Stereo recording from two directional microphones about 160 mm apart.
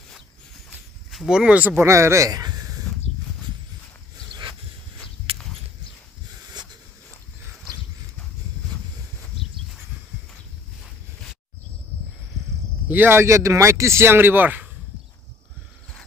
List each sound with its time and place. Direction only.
1.1 s speech: 5° right (ahead or behind); by 2.7 s 25° right (ahead or behind)
12.8 s speech: 15° right (ahead or behind)